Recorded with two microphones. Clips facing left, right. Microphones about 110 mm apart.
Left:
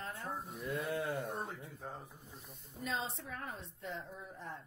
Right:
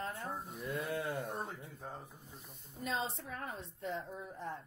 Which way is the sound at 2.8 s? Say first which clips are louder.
Right 2 dB; centre (ahead or behind).